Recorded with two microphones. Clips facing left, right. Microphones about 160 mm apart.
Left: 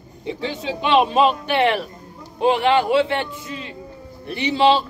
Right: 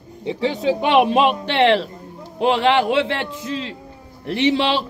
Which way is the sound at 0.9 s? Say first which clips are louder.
Left 1 dB; 80° right.